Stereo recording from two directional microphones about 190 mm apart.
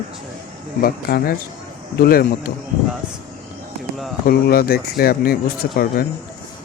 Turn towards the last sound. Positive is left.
turn(degrees=50)  # may be behind; listen again after turning